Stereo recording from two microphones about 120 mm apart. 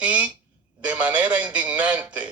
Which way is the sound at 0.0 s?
15° right (ahead or behind).